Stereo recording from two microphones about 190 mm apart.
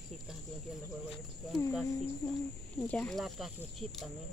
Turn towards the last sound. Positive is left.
turn(degrees=0)  # may be behind; listen again after turning